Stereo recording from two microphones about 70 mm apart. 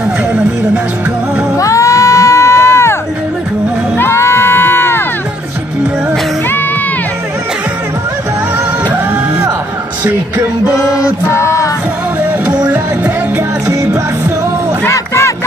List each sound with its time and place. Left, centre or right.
1.6 s music: left
4.0 s crowd: left
11.2 s music: left
12.2 s music: right
14.9 s crowd: left